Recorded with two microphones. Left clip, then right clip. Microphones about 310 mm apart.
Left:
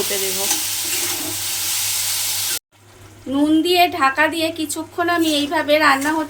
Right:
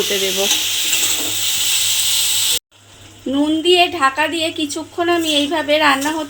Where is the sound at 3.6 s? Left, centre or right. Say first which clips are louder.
Right 3 dB; right.